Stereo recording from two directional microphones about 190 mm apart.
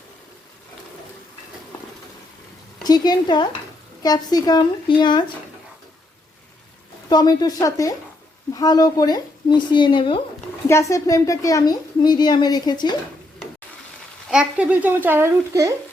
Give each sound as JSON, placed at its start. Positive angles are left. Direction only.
{"t": 2.8, "sound": "a woman's voice", "side_deg": 20}
{"t": 7.1, "sound": "a woman's voice", "side_deg": 20}
{"t": 14.3, "sound": "speech", "side_deg": -5}